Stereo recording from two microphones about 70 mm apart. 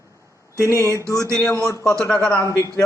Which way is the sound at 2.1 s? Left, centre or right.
Left.